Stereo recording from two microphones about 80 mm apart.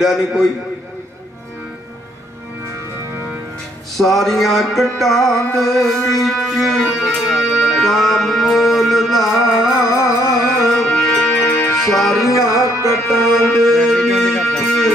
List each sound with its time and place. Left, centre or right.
0.0 s music: centre
4.0 s music: centre
9.8 s music: left
10.6 s music: centre
12.5 s music: left
13.6 s music: centre